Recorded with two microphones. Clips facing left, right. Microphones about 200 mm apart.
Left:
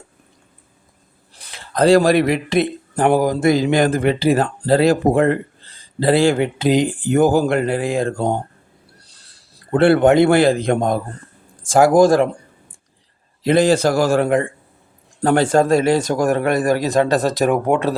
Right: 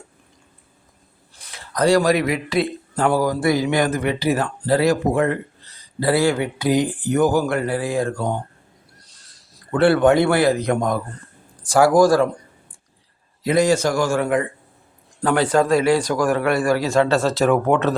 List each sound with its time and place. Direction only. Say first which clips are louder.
1.8 s speech: left 4 dB; 30° left (ahead or behind)
9.7 s speech: left 3 dB; 25° left (ahead or behind)
13.6 s a man's voice: left 2 dB; 35° left (ahead or behind); by 17.9 s 10° left (ahead or behind)